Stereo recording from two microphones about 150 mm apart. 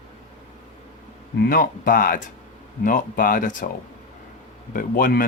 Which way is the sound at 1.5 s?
70° left (ahead or behind).